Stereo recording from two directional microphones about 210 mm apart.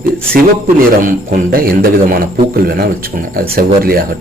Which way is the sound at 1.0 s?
40° right (ahead or behind).